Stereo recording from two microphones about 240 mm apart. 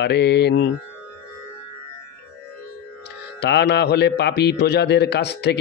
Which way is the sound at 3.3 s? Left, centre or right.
Left.